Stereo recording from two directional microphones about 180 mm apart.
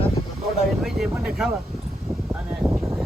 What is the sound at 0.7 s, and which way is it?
Vehicle, centre (ahead or behind).